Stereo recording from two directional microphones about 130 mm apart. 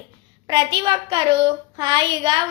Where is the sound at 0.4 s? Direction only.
35° right (ahead or behind).